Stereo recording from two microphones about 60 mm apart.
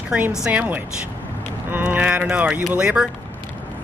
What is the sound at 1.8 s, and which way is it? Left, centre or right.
Speech, centre.